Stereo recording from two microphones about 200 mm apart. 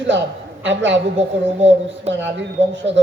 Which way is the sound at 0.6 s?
65° right (ahead or behind).